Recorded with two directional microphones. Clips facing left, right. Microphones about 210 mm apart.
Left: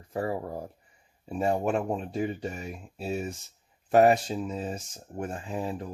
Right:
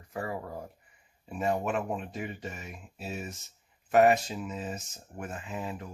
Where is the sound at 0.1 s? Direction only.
30° left (ahead or behind).